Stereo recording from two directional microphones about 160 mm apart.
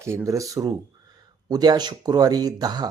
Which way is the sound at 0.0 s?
15° right (ahead or behind).